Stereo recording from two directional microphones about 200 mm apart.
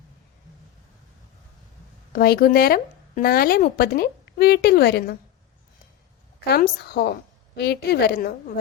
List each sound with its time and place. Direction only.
2.1 s speech: 50° left (ahead or behind)
6.4 s speech: 50° left (ahead or behind)